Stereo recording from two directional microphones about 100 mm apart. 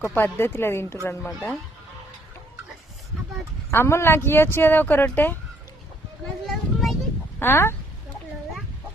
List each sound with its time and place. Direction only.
0.1 s speech: 20° left (ahead or behind)
3.7 s speech: 25° left (ahead or behind)
6.4 s a sound: centre (ahead or behind)
7.3 s speech: 25° left (ahead or behind)